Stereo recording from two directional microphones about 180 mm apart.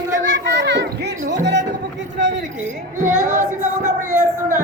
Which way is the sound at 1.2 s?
75° right (ahead or behind).